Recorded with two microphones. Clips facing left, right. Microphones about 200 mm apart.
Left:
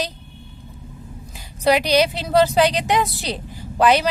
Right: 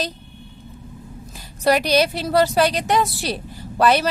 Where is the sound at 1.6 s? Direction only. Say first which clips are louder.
Left 1 dB; 15° left (ahead or behind).